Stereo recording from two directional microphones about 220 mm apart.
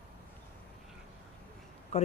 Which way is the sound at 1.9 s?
30° left (ahead or behind).